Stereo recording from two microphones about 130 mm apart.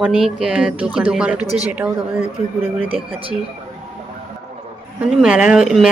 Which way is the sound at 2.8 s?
45° right (ahead or behind).